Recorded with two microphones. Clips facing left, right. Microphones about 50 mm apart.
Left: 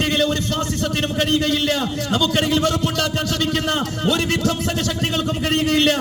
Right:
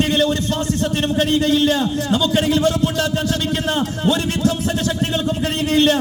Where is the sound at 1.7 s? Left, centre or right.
Left.